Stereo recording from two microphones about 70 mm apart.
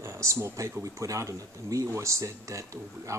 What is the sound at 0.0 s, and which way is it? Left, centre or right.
Speech, right.